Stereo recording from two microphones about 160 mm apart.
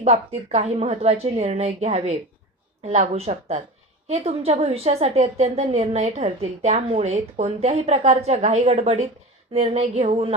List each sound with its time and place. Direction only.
0.0 s a woman's voice: 40° right (ahead or behind)